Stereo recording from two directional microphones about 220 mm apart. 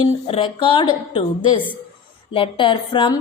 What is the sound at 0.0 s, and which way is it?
A woman's voice, 25° left (ahead or behind).